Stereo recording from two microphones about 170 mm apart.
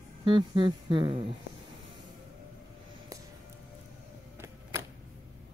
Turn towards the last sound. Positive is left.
turn(degrees=-15)  # may be behind; listen again after turning